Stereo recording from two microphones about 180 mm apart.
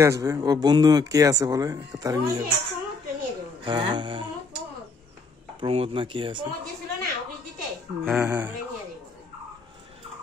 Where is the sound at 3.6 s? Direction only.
25° right (ahead or behind).